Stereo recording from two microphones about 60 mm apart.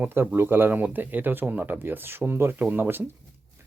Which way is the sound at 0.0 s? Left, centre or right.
Right.